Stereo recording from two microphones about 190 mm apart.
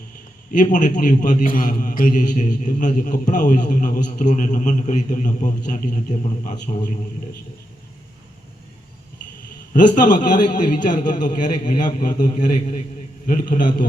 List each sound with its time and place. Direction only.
0.5 s a man's voice: 40° left (ahead or behind)
9.7 s a man's voice: 40° left (ahead or behind)